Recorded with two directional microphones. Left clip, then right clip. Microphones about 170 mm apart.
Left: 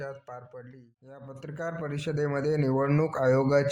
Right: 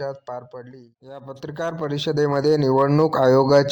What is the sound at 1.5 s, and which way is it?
Speech, 30° right (ahead or behind).